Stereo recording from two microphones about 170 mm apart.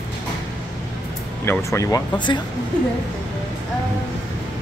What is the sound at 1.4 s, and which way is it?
Speech, 15° left (ahead or behind).